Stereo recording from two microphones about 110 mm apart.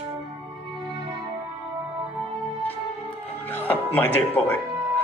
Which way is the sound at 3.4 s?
15° left (ahead or behind).